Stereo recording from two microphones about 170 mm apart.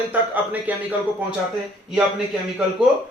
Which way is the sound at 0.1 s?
10° right (ahead or behind).